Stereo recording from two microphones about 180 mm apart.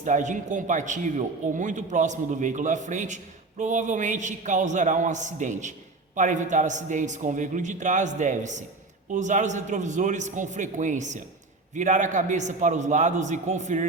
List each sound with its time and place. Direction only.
0.0 s a man's voice: 45° right (ahead or behind)